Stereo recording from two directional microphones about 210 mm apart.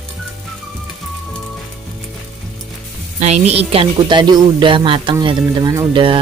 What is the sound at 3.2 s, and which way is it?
A woman's voice, 30° right (ahead or behind).